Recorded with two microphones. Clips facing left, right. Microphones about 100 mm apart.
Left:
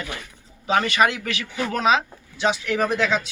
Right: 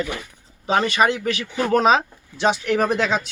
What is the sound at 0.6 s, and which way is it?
Speech, 30° right (ahead or behind).